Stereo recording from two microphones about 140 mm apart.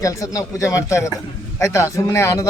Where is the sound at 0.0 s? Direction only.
25° left (ahead or behind).